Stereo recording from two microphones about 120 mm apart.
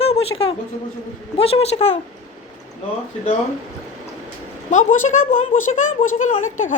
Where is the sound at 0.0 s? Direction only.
55° left (ahead or behind).